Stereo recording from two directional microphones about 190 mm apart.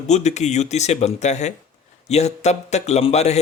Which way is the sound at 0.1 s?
35° left (ahead or behind).